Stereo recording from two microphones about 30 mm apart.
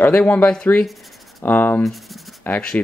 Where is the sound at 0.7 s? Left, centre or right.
Left.